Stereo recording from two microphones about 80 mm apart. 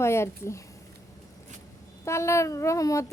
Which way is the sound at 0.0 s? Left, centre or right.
Left.